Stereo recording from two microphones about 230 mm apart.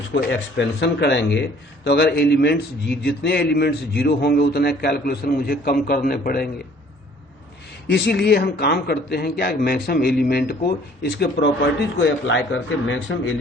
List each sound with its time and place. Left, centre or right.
0.1 s a man's voice: left
7.9 s a man's voice: left